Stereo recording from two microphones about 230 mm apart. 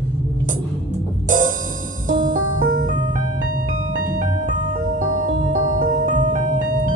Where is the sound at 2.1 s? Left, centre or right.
Right.